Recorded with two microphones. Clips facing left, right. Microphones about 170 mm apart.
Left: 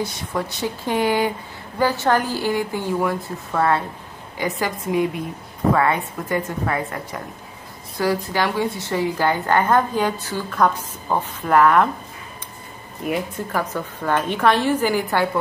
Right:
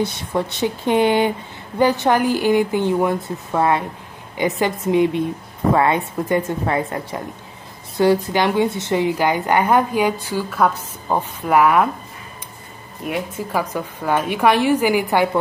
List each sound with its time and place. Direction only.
0.3 s a woman's voice: 20° right (ahead or behind)
13.0 s a woman's voice: 5° right (ahead or behind)